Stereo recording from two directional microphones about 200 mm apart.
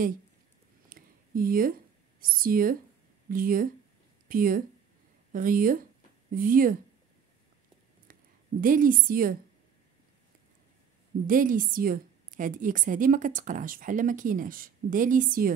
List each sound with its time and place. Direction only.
0.8 s a sound: 45° right (ahead or behind)
3.3 s speech: 45° right (ahead or behind)
8.1 s a woman's voice: 45° right (ahead or behind)
11.2 s a woman's voice: 40° right (ahead or behind)